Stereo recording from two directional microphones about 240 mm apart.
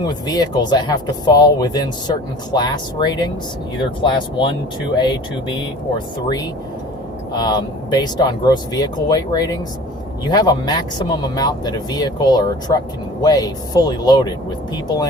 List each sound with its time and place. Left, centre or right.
0.1 s speech: centre